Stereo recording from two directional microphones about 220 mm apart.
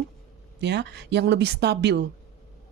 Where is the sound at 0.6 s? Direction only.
50° right (ahead or behind).